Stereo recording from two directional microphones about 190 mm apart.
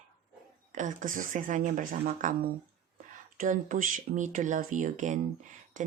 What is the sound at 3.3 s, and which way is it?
Speech, 45° right (ahead or behind).